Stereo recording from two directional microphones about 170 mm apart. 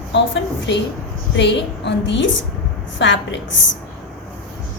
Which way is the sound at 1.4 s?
90° left.